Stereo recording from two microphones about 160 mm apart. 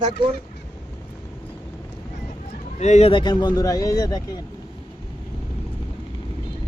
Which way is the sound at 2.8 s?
45° left (ahead or behind).